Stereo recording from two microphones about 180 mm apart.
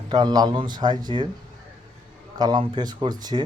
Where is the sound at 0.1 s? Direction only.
20° right (ahead or behind).